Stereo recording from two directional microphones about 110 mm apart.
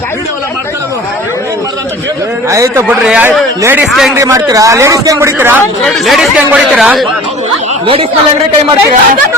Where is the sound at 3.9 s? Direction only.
Centre (ahead or behind).